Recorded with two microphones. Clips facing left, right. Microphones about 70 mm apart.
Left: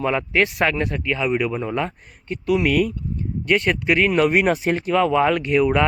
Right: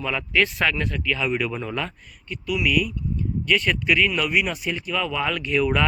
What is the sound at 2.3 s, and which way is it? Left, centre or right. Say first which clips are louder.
Speech: left 4 dB; left.